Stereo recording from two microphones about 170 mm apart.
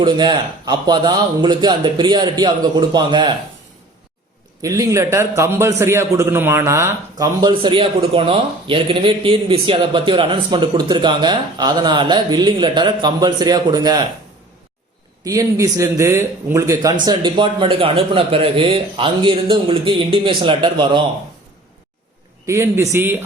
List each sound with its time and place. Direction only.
0.0 s a man's voice: 25° right (ahead or behind)
4.6 s a man's voice: 20° right (ahead or behind)
7.5 s a man's voice: 30° right (ahead or behind)
15.2 s a man's voice: 20° right (ahead or behind)
22.4 s a man's voice: 15° right (ahead or behind)